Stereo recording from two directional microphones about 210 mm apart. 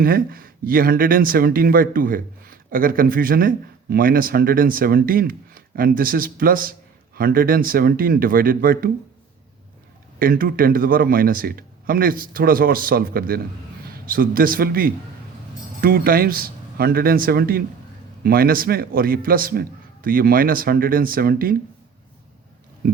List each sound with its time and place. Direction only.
0.0 s speech: 45° right (ahead or behind)
10.2 s speech: 40° right (ahead or behind)